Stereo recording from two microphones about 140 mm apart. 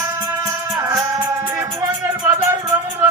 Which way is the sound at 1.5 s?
20° right (ahead or behind).